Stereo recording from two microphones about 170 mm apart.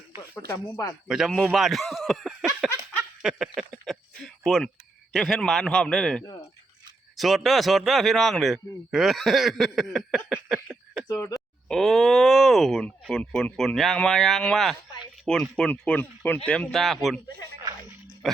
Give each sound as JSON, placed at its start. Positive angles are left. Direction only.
{"t": 0.2, "sound": "speech", "side_deg": 20}
{"t": 1.0, "sound": "a man's voice", "side_deg": 0}
{"t": 3.2, "sound": "a sound", "side_deg": -5}
{"t": 5.1, "sound": "a man's voice", "side_deg": 5}
{"t": 6.2, "sound": "speech", "side_deg": 20}
{"t": 7.2, "sound": "a man's voice", "side_deg": 0}
{"t": 11.1, "sound": "speech", "side_deg": 20}
{"t": 11.3, "sound": "a man's voice", "side_deg": 0}